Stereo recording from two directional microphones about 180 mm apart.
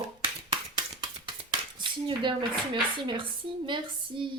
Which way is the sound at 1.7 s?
25° right (ahead or behind).